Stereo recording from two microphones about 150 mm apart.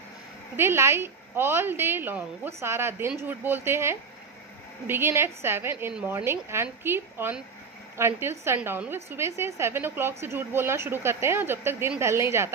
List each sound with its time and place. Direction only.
0.6 s a woman's voice: 15° right (ahead or behind)